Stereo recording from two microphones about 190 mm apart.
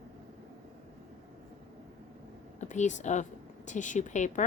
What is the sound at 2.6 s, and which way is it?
A woman's voice, 40° left (ahead or behind).